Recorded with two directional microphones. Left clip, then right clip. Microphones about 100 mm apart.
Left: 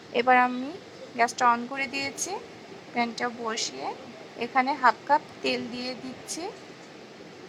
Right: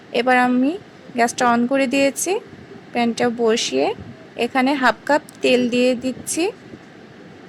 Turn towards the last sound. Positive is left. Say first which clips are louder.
# right 13 dB
turn(degrees=-45)  # may be behind; listen again after turning